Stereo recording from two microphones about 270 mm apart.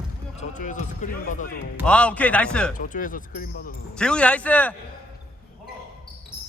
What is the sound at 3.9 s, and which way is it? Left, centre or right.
Speech, centre.